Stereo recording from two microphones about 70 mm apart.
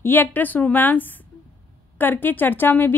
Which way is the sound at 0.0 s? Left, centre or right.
Left.